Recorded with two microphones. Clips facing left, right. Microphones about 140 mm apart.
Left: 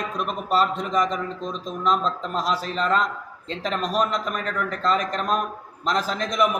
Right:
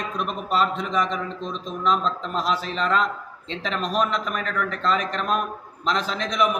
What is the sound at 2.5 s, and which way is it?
A man's voice, 40° left (ahead or behind).